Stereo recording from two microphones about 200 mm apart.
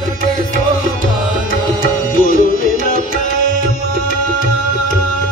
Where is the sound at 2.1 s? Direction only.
45° left (ahead or behind).